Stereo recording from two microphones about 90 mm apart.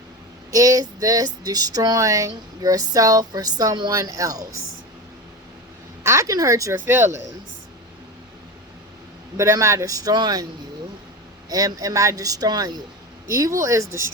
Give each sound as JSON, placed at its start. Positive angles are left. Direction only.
{"t": 0.5, "sound": "speech", "side_deg": -40}
{"t": 6.0, "sound": "speech", "side_deg": -35}
{"t": 9.4, "sound": "speech", "side_deg": -35}
{"t": 11.4, "sound": "speech", "side_deg": -45}
{"t": 13.3, "sound": "speech", "side_deg": -35}